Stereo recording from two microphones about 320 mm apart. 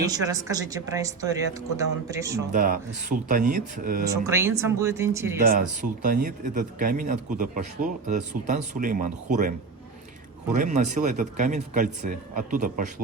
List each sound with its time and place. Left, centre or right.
0.1 s speech: centre
2.5 s speech: right
4.1 s speech: centre
5.5 s speech: right